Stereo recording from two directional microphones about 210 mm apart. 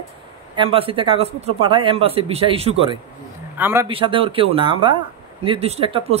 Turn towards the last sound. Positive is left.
turn(degrees=-30)  # may be behind; listen again after turning